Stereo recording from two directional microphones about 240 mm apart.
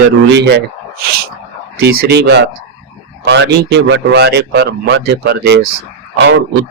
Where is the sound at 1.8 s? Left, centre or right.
Right.